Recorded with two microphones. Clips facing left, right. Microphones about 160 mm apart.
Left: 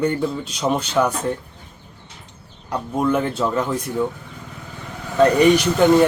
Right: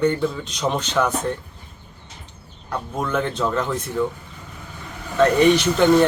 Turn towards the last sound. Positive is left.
turn(degrees=10)  # may be behind; listen again after turning